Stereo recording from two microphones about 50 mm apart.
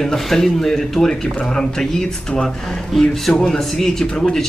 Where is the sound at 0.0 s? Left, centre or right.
Centre.